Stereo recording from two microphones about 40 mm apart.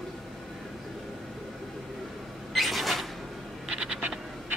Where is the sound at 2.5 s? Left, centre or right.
Centre.